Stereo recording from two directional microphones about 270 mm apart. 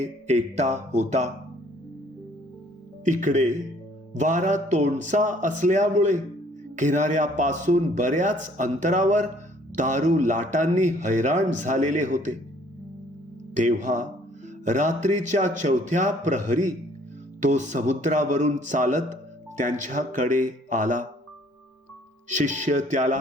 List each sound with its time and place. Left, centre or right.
0.0 s a man's voice: right
3.0 s a man's voice: right
13.5 s a man's voice: right
22.3 s a man's voice: right